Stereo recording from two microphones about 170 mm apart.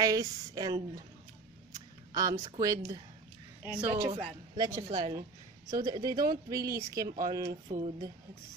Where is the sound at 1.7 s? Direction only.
20° right (ahead or behind).